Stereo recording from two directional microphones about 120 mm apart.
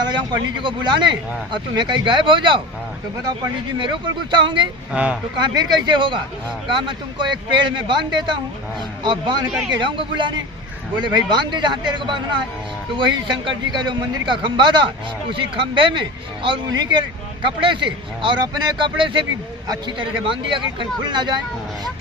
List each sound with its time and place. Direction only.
0.0 s speech: 40° right (ahead or behind)
4.9 s speech: 10° right (ahead or behind)
5.4 s speech: 35° right (ahead or behind)
9.5 s speech: 5° right (ahead or behind)
9.7 s speech: 40° right (ahead or behind)